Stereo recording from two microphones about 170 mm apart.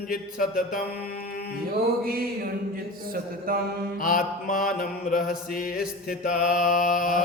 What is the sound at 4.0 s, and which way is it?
Mantra, 55° left (ahead or behind).